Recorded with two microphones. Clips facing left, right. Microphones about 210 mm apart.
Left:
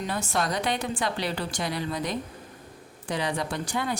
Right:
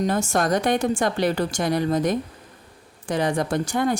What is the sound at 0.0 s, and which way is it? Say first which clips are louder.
Speech: right 7 dB; 45° right (ahead or behind).